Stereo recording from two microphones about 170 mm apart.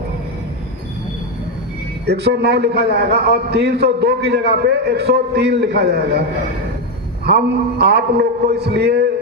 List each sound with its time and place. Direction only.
2.0 s a man's voice: 80° right
7.8 s a man's voice: 75° right (ahead or behind)